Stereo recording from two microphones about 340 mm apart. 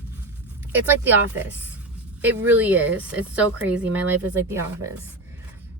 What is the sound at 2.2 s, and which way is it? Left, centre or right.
A woman's voice, centre.